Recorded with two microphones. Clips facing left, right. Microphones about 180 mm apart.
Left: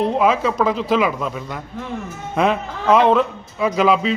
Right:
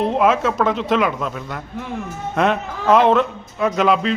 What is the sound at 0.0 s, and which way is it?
A man's voice, centre (ahead or behind).